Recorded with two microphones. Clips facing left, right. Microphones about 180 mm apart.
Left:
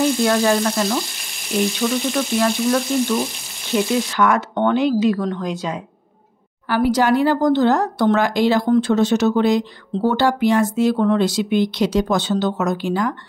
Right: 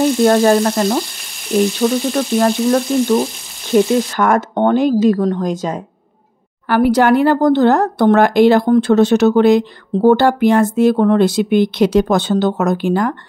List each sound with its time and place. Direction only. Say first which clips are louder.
0.2 s frying: right 6 dB; 45° right (ahead or behind)
4.2 s frying: right 3 dB; 45° right (ahead or behind)
6.7 s speech: right 5 dB; 60° right (ahead or behind)